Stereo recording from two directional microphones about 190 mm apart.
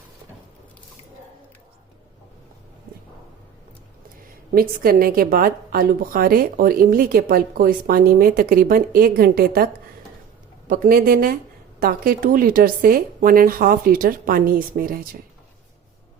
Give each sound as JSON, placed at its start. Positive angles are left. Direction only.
{"t": 4.5, "sound": "a woman's voice", "side_deg": -50}
{"t": 10.7, "sound": "a woman's voice", "side_deg": -50}